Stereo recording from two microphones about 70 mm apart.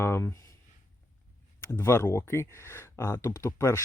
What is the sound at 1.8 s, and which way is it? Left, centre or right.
Speech, left.